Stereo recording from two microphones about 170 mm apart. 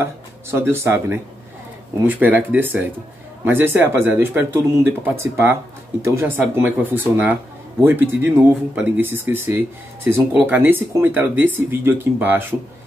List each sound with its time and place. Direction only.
0.0 s speech: 15° right (ahead or behind)
2.0 s speech: 10° right (ahead or behind)